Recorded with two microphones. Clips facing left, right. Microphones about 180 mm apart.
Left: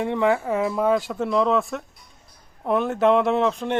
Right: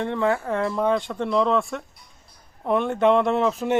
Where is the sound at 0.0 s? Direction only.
15° left (ahead or behind).